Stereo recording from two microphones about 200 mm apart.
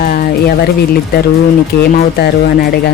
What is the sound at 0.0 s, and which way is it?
Music, 50° left (ahead or behind).